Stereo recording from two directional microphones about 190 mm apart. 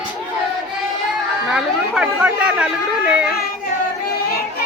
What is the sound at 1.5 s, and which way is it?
Speech, centre (ahead or behind).